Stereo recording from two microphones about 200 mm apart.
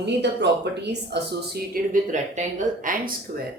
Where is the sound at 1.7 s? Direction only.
40° right (ahead or behind).